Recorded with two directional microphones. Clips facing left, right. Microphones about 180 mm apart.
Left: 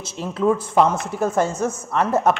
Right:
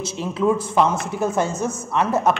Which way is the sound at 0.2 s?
45° left (ahead or behind).